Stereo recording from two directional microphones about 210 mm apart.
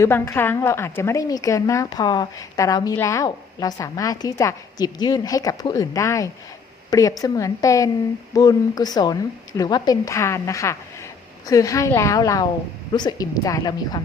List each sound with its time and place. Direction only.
0.0 s a woman's voice: 10° left (ahead or behind)